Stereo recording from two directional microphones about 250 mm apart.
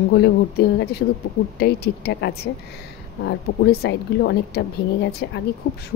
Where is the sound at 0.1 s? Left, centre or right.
Left.